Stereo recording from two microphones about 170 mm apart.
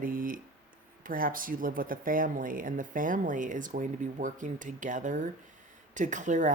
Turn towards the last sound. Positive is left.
turn(degrees=-45)  # may be behind; listen again after turning